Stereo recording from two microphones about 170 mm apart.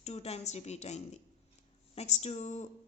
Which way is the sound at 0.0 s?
40° left (ahead or behind).